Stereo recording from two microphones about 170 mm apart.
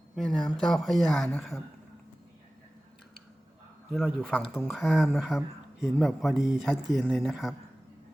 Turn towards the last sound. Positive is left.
turn(degrees=0)  # may be behind; listen again after turning